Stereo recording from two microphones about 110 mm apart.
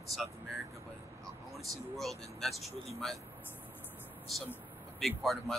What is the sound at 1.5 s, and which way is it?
Speech, centre (ahead or behind).